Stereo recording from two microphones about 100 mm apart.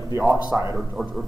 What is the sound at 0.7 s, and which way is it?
Speech, 5° right (ahead or behind).